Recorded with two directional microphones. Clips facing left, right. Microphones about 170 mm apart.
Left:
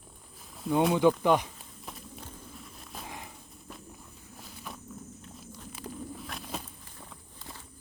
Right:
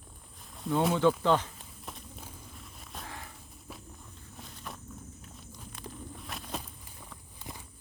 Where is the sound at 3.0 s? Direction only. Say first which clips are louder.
Left 2 dB; 15° left (ahead or behind).